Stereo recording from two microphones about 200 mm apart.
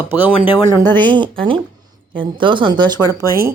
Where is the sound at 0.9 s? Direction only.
25° right (ahead or behind).